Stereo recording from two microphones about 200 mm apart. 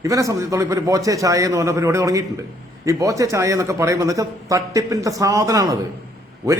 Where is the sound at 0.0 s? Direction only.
15° right (ahead or behind).